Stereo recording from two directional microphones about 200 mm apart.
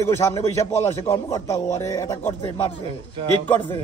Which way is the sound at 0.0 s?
15° left (ahead or behind).